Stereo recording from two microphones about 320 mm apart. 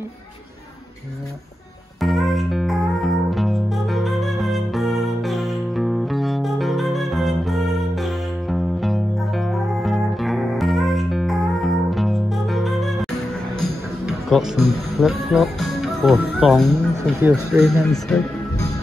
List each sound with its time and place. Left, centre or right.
2.0 s music: centre
13.6 s speech: centre